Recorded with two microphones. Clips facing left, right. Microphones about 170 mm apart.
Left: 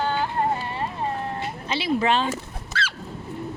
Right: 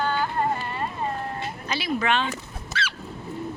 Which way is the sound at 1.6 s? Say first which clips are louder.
Left 3 dB; 25° left (ahead or behind).